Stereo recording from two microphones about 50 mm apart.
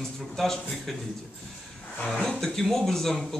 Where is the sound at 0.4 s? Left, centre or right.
Centre.